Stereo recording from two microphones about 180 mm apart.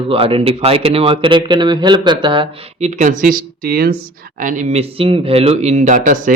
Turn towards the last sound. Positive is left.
turn(degrees=-45)  # may be behind; listen again after turning